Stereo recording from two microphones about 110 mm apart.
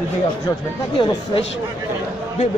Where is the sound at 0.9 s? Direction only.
50° left (ahead or behind).